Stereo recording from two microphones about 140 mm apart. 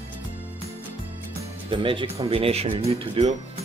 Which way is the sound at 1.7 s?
40° right (ahead or behind).